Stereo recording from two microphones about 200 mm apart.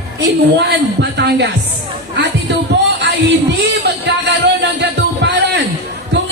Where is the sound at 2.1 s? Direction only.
60° right (ahead or behind).